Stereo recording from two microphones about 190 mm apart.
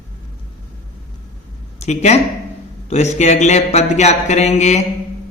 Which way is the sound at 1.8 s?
35° left (ahead or behind).